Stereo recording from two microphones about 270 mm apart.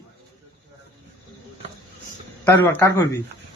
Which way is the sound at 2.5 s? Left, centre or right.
Centre.